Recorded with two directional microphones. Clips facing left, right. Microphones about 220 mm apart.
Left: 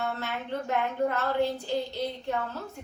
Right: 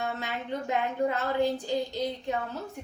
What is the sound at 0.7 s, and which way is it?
A woman's voice, 15° right (ahead or behind).